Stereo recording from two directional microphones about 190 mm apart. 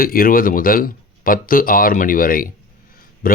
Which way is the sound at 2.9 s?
50° left (ahead or behind).